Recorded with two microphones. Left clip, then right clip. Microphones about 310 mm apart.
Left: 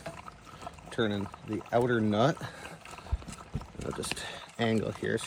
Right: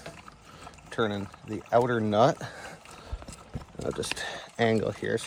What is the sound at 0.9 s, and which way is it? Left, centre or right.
Speech, right.